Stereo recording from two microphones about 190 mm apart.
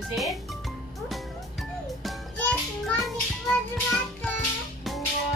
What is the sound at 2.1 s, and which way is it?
Music, centre (ahead or behind).